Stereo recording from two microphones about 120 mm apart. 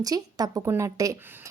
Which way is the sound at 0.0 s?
30° right (ahead or behind).